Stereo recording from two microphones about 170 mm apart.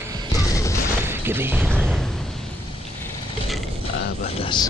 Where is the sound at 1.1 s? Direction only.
15° right (ahead or behind).